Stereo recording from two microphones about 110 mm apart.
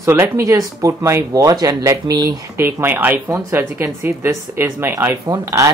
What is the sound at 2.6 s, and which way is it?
Speech, 20° right (ahead or behind).